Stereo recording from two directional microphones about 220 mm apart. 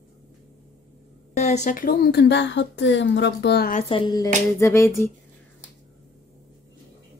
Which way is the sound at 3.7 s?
25° left (ahead or behind).